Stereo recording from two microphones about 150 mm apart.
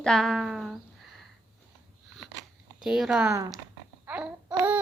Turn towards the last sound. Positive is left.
turn(degrees=-10)  # may be behind; listen again after turning